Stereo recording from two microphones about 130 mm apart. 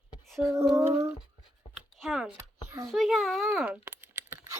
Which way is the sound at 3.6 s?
15° right (ahead or behind).